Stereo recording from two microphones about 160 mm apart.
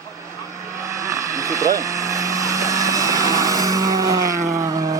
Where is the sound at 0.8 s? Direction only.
20° right (ahead or behind).